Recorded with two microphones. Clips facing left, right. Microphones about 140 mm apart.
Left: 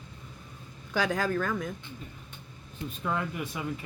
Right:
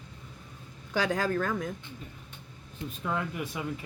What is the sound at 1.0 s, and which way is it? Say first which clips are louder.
Speech: even; 30° right (ahead or behind).